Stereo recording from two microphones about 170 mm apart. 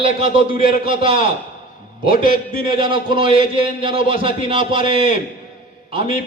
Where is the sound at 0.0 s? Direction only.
30° right (ahead or behind).